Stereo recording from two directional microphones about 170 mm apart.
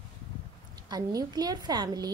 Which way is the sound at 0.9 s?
20° right (ahead or behind).